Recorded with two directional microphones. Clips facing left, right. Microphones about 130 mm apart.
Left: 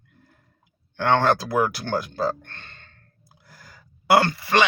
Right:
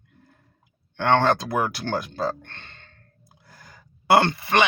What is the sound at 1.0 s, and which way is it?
Speech, 25° right (ahead or behind).